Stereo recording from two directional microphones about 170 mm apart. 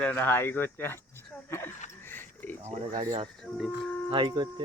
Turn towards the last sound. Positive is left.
turn(degrees=-25)  # may be behind; listen again after turning